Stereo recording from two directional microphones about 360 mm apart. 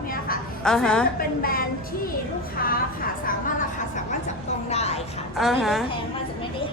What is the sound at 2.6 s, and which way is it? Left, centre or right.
Vehicle, left.